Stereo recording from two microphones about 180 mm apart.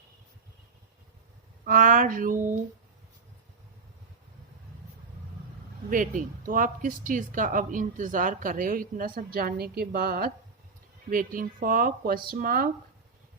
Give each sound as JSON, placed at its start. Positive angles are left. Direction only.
{"t": 1.6, "sound": "speech", "side_deg": -50}
{"t": 5.9, "sound": "speech", "side_deg": -50}